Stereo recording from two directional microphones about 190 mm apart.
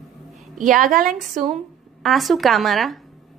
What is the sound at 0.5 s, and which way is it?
Speech, 45° right (ahead or behind).